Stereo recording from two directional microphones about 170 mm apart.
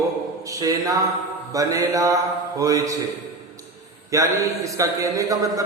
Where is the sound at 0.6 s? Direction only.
20° right (ahead or behind).